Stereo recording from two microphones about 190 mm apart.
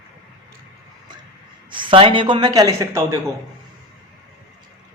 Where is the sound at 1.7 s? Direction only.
25° right (ahead or behind).